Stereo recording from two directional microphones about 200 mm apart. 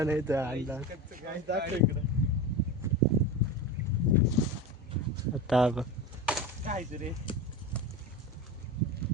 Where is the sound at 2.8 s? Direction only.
15° right (ahead or behind).